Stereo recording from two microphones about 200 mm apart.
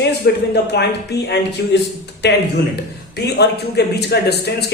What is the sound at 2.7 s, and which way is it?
A man's voice, 55° left (ahead or behind).